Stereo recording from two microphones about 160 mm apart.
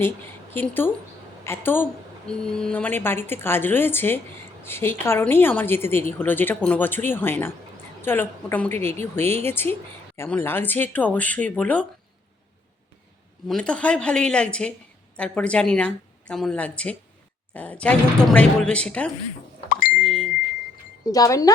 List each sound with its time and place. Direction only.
0.5 s a woman's voice: 15° left (ahead or behind)
13.5 s a woman's voice: 5° left (ahead or behind)
20.0 s bicycle bell: centre (ahead or behind)
21.1 s speech: 20° left (ahead or behind)